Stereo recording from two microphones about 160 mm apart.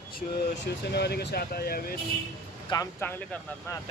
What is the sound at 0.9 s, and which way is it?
Speech, 90° left.